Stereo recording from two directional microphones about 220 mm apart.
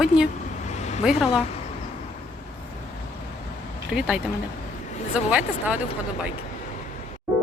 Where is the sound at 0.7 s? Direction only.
30° left (ahead or behind).